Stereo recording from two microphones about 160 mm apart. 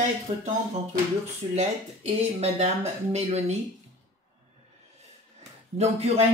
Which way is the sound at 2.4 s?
45° right (ahead or behind).